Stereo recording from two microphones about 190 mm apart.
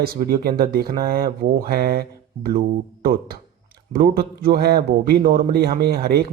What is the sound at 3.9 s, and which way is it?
Speech, 55° right (ahead or behind).